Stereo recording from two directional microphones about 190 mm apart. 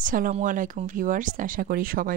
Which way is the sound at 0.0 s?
45° right (ahead or behind).